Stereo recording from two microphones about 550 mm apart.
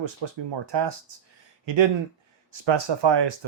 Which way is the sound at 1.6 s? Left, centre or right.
Right.